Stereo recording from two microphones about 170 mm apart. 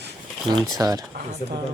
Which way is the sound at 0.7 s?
20° right (ahead or behind).